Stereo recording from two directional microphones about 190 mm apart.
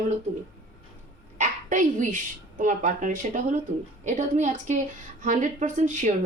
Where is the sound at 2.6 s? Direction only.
40° right (ahead or behind).